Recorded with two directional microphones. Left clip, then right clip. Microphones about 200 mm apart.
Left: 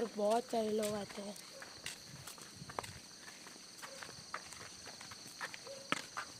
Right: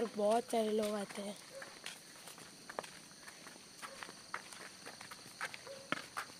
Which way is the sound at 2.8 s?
50° left (ahead or behind).